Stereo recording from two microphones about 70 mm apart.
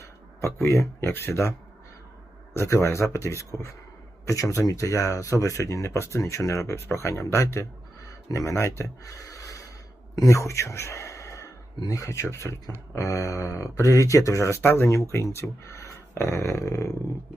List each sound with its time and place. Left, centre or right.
0.0 s speech: left